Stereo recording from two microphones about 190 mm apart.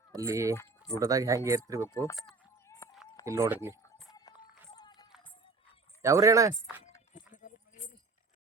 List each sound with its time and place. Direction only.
0.1 s speech: 15° right (ahead or behind)
1.9 s speech: 15° left (ahead or behind)
2.6 s run: 15° left (ahead or behind)
3.2 s speech: 15° right (ahead or behind)
4.1 s run: 20° left (ahead or behind)
6.0 s speech: 15° right (ahead or behind)